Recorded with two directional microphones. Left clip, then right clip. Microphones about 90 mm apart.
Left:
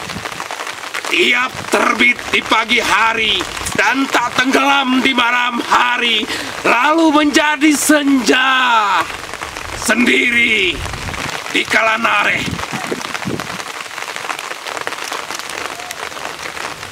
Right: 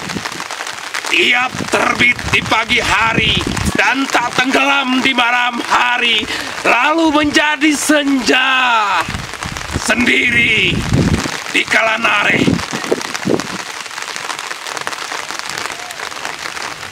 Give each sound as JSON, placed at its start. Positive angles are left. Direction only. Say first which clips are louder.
{"t": 1.1, "sound": "speech", "louder": "right 1 dB", "side_deg": 10}